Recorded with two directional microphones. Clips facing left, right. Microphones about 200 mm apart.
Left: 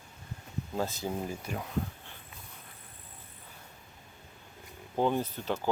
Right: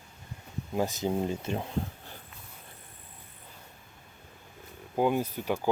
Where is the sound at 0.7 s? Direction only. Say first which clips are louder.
Right 5 dB; 15° right (ahead or behind).